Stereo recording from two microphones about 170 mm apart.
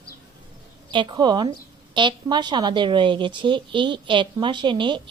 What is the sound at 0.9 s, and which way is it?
A woman's voice, 30° right (ahead or behind).